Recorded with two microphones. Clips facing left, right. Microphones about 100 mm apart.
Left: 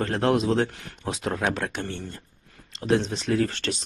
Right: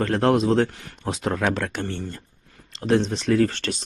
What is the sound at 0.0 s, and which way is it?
Speech, 45° right (ahead or behind).